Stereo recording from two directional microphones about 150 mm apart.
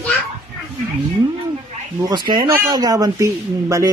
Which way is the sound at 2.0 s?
30° right (ahead or behind).